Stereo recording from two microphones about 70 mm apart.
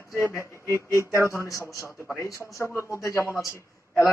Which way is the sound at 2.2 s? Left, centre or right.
Left.